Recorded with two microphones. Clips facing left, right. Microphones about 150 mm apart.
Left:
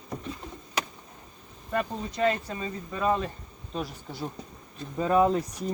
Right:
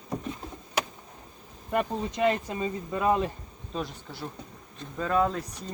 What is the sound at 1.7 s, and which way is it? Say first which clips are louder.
Speech: right 2 dB; 20° right (ahead or behind).